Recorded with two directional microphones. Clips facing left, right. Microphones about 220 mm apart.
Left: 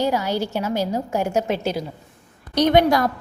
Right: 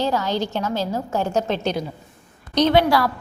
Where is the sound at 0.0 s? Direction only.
10° left (ahead or behind).